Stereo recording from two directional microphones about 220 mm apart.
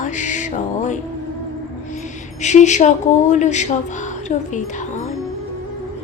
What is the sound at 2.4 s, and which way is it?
Music, 30° left (ahead or behind).